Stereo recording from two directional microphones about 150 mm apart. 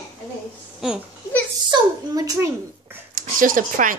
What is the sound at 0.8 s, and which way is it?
Speech, 5° right (ahead or behind).